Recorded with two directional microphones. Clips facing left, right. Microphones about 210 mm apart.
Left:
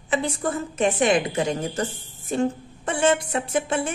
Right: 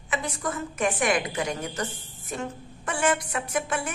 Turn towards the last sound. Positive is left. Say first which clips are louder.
# left 4 dB
turn(degrees=25)  # may be behind; listen again after turning